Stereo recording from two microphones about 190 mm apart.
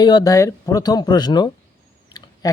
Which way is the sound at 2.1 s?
20° left (ahead or behind).